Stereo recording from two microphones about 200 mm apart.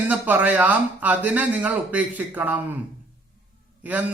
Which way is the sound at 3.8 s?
10° right (ahead or behind).